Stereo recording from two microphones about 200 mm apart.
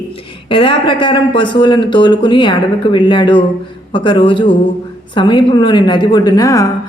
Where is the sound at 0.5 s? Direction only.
25° left (ahead or behind).